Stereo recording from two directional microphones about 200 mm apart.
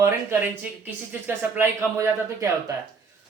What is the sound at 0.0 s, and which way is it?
Speech, 10° right (ahead or behind).